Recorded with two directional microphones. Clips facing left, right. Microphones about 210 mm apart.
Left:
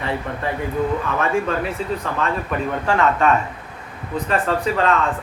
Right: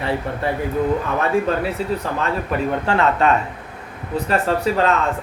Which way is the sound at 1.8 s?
35° right (ahead or behind).